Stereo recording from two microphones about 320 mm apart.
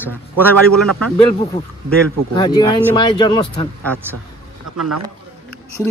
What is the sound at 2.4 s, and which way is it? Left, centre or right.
Speech, centre.